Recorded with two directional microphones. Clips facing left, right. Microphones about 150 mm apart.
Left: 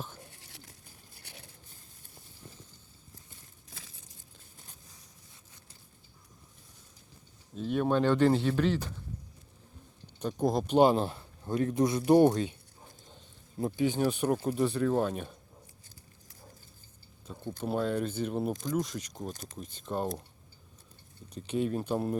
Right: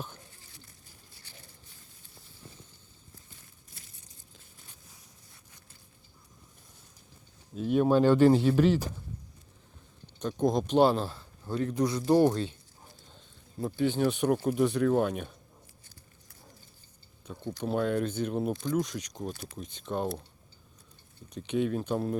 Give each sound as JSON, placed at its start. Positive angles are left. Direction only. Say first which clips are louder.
{"t": 0.3, "sound": "a sound", "louder": "left 2 dB", "side_deg": 75}
{"t": 1.2, "sound": "a sound", "louder": "left 4 dB", "side_deg": 70}
{"t": 3.7, "sound": "crumpling", "louder": "left 5 dB", "side_deg": 90}
{"t": 7.5, "sound": "speech", "louder": "right 4 dB", "side_deg": -10}
{"t": 10.2, "sound": "speech", "louder": "right 2 dB", "side_deg": 5}
{"t": 12.3, "sound": "speech", "louder": "left 1 dB", "side_deg": 10}
{"t": 13.6, "sound": "speech", "louder": "left 1 dB", "side_deg": 20}
{"t": 13.8, "sound": "speech", "louder": "right 2 dB", "side_deg": 10}
{"t": 14.3, "sound": "speech", "louder": "right 3 dB", "side_deg": -5}
{"t": 17.2, "sound": "speech", "louder": "right 1 dB", "side_deg": 5}
{"t": 21.4, "sound": "speech", "louder": "right 2 dB", "side_deg": 5}